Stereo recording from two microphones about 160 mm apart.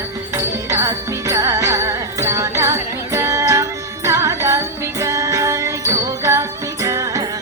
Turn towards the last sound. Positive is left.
turn(degrees=-20)  # may be behind; listen again after turning